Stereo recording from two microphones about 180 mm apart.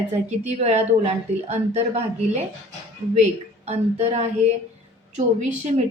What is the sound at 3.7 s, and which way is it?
A woman's voice, 35° right (ahead or behind).